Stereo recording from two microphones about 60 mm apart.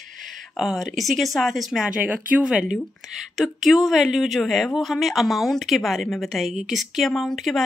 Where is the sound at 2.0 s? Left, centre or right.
Right.